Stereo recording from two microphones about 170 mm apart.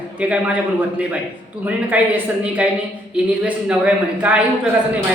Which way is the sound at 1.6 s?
10° right (ahead or behind).